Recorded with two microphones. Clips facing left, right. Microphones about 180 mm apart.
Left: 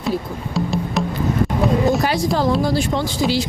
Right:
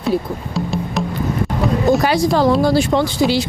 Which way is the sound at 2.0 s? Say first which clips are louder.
Right 4 dB; 80° right.